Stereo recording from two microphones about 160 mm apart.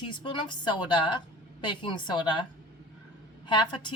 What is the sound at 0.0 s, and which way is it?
A woman's voice, 30° left (ahead or behind).